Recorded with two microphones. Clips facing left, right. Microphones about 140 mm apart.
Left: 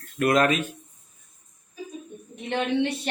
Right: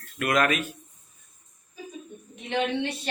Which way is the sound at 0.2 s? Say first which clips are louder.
Left 3 dB; 30° left (ahead or behind).